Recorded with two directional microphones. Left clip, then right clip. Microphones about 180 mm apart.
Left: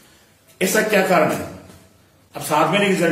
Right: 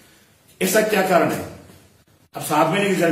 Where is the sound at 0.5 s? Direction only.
15° right (ahead or behind).